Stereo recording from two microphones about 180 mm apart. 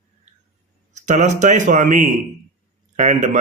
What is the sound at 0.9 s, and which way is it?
A man's voice, 40° right (ahead or behind).